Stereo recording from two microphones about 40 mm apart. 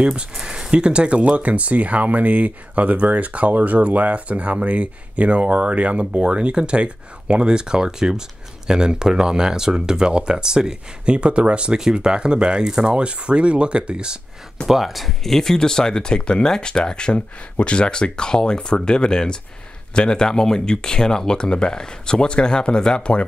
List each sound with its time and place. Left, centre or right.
0.0 s speech: right
11.1 s speech: right
14.7 s speech: centre; by 23.2 s left